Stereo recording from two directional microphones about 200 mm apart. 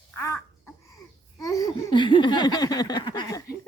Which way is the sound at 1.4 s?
15° left (ahead or behind).